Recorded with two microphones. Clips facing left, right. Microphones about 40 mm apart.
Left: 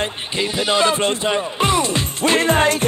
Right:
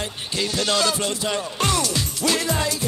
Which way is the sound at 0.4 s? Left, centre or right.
Left.